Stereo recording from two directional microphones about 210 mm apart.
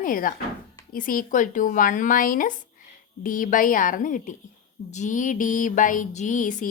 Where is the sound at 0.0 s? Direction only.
40° left (ahead or behind).